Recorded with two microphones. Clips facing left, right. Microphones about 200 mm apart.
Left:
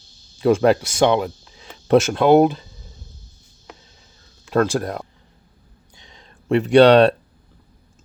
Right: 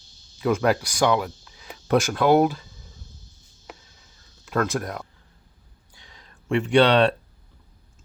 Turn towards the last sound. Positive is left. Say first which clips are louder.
# left 6 dB
turn(degrees=40)  # may be behind; listen again after turning